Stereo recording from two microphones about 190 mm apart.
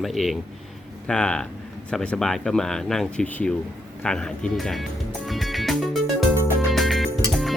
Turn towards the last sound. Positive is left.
turn(degrees=0)  # may be behind; listen again after turning